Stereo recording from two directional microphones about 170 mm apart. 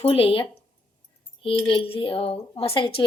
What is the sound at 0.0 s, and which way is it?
Speech, 35° left (ahead or behind).